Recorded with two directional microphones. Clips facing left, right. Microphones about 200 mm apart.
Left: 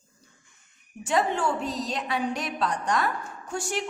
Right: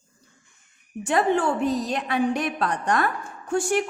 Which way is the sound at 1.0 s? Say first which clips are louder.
Right 4 dB; 55° right (ahead or behind).